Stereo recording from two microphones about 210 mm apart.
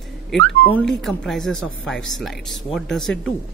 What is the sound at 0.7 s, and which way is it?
A man's voice, centre (ahead or behind).